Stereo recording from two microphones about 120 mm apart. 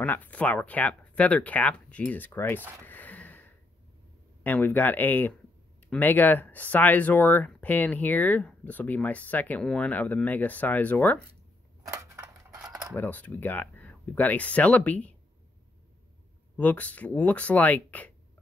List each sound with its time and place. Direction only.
0.0 s speech: 15° left (ahead or behind)
2.8 s a sound: 15° left (ahead or behind)
4.4 s speech: 15° left (ahead or behind)
11.8 s a sound: 25° right (ahead or behind)
12.9 s speech: 15° left (ahead or behind)
16.5 s speech: 10° left (ahead or behind)